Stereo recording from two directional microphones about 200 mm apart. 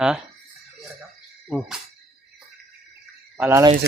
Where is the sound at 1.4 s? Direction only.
Centre (ahead or behind).